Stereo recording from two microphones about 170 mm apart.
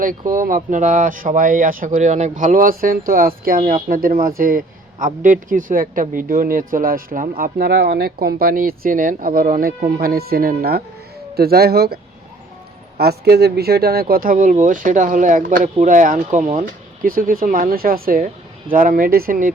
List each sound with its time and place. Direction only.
0.0 s a man's voice: 55° right (ahead or behind)
13.0 s a man's voice: 70° right (ahead or behind)